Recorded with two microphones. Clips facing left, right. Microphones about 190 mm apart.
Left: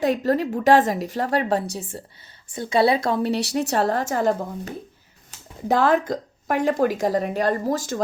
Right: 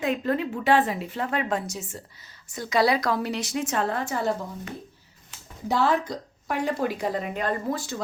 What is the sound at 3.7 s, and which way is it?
A woman's voice, 40° left (ahead or behind).